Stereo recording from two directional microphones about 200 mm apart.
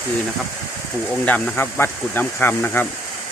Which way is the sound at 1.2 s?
5° left (ahead or behind).